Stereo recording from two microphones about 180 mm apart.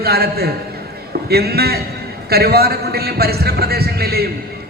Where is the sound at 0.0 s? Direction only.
60° right (ahead or behind).